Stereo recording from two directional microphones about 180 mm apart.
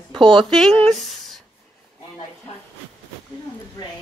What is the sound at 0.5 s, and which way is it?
Speech, 5° left (ahead or behind).